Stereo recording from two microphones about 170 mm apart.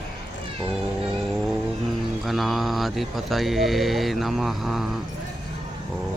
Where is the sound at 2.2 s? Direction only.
Centre (ahead or behind).